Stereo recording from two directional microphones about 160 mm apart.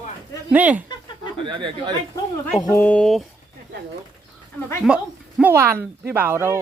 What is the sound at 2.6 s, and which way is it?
Speech, 15° left (ahead or behind).